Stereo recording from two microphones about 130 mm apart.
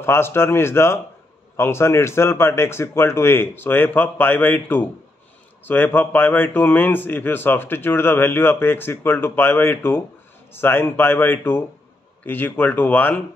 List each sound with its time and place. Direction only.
0.0 s a man's voice: 20° left (ahead or behind)